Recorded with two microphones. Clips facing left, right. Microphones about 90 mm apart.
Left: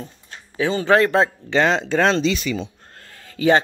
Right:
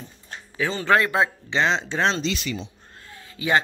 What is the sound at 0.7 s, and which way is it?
Speech, 20° left (ahead or behind).